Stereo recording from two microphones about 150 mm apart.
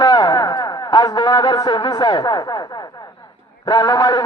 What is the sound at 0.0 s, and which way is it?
Speech, 30° left (ahead or behind).